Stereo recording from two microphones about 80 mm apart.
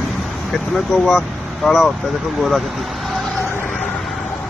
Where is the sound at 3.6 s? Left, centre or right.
Centre.